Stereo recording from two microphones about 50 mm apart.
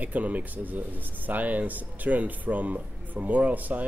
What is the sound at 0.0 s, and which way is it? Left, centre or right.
Speech, right.